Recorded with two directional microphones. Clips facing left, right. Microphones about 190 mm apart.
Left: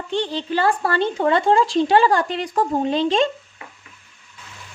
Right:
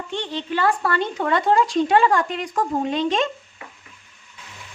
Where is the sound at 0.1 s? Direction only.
35° left (ahead or behind).